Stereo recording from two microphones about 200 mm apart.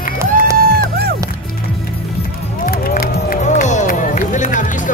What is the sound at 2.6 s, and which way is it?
Run, 45° left (ahead or behind).